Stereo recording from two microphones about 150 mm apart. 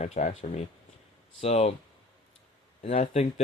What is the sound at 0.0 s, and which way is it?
Speech, 50° left (ahead or behind).